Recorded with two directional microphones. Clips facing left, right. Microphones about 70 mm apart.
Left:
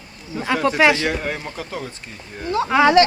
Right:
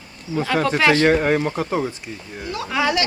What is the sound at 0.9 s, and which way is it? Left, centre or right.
Speech, right.